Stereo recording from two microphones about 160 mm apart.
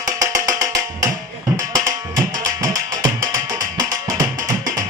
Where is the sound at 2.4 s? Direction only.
20° right (ahead or behind).